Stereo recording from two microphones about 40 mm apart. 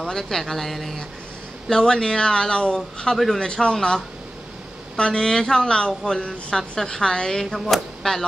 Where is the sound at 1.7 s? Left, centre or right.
Centre.